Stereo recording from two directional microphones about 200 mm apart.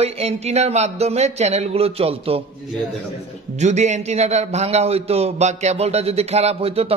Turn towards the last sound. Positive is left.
turn(degrees=-30)  # may be behind; listen again after turning